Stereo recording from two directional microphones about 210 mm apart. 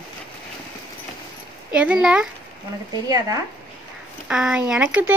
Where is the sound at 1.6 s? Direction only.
5° right (ahead or behind).